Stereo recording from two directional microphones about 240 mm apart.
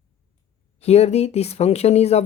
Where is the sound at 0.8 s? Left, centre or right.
Left.